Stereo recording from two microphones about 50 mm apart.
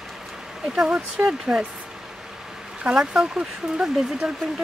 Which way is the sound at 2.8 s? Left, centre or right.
Centre.